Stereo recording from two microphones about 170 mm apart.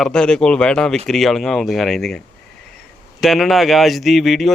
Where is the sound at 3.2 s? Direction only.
Centre (ahead or behind).